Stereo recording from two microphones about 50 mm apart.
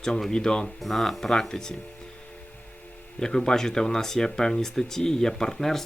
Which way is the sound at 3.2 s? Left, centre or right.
Centre.